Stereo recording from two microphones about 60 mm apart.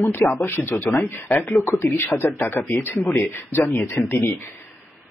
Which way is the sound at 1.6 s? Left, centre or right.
Left.